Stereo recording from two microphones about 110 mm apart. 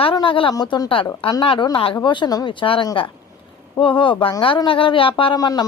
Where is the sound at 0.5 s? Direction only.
40° left (ahead or behind).